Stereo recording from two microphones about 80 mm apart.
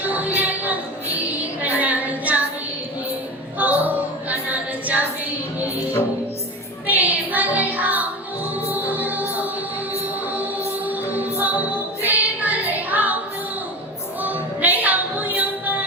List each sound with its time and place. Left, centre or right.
0.1 s music: centre
3.6 s music: centre
6.8 s child singing: centre
8.7 s music: right
10.3 s choir: centre
12.0 s music: centre
14.2 s music: right